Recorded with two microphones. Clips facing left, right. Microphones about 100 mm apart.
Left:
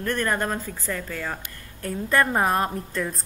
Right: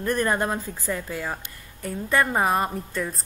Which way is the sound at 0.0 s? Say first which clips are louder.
Right 2 dB; 15° right (ahead or behind).